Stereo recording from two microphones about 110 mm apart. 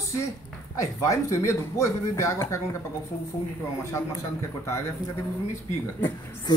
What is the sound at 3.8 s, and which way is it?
Speech, 25° left (ahead or behind).